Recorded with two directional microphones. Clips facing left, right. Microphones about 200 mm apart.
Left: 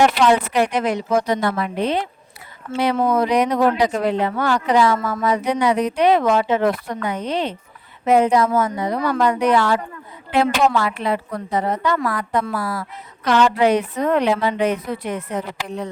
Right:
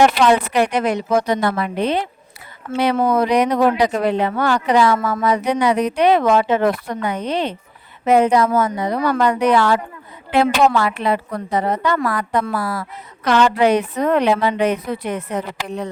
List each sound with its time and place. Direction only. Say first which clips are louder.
0.0 s speech: right 2 dB; 70° right (ahead or behind)